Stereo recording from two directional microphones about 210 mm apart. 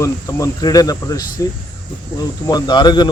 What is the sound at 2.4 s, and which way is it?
Speech, 20° left (ahead or behind).